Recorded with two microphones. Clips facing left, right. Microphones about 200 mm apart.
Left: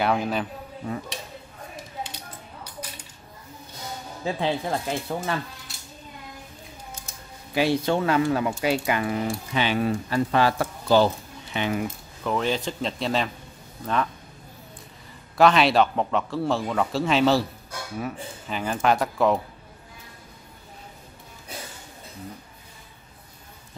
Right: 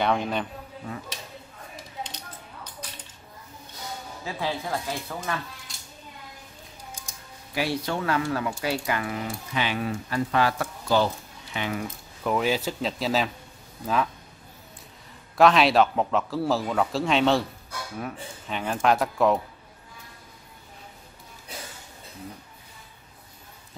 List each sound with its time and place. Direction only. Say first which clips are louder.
0.0 s speech: left 1 dB; 5° left (ahead or behind)
2.0 s a sound: left 1 dB; 10° left (ahead or behind)
4.2 s speech: left 5 dB; 25° left (ahead or behind)
7.5 s speech: left 6 dB; 25° left (ahead or behind)
12.2 s speech: right 1 dB; 10° right (ahead or behind)
15.3 s speech: even; centre (ahead or behind)